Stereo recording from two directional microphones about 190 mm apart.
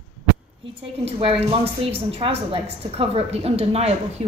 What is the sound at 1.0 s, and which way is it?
A woman's voice, 30° right (ahead or behind).